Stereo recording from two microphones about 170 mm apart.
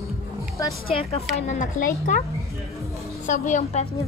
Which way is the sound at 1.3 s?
45° left (ahead or behind).